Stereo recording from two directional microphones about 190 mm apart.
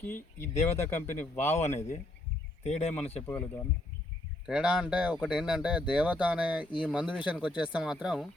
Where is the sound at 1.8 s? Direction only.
40° left (ahead or behind).